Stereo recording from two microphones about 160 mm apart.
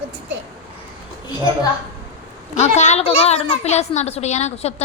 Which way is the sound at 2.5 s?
45° left (ahead or behind).